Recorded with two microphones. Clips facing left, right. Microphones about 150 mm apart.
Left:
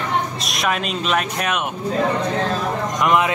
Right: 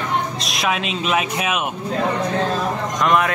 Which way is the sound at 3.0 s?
15° left (ahead or behind).